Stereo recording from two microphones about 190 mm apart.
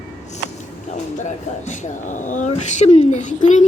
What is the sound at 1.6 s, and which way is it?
Speech, 40° left (ahead or behind).